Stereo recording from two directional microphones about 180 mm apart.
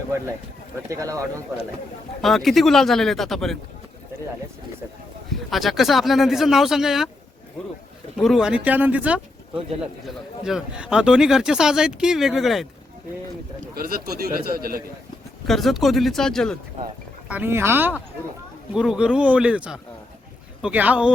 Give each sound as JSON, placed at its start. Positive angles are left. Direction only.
{"t": 0.9, "sound": "speech", "side_deg": -20}
{"t": 2.2, "sound": "speech", "side_deg": 0}
{"t": 5.5, "sound": "speech", "side_deg": 0}
{"t": 8.1, "sound": "speech", "side_deg": 0}
{"t": 10.4, "sound": "speech", "side_deg": -5}
{"t": 13.7, "sound": "a man's voice", "side_deg": -55}
{"t": 15.4, "sound": "speech", "side_deg": 0}
{"t": 17.2, "sound": "speech", "side_deg": -10}